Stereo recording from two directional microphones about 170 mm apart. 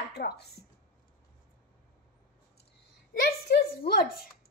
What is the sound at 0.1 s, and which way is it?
Speech, 70° left (ahead or behind).